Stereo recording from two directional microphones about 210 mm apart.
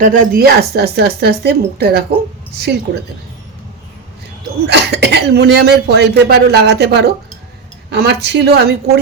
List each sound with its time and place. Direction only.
0.0 s speech: 45° right (ahead or behind)
4.6 s speech: 55° right (ahead or behind)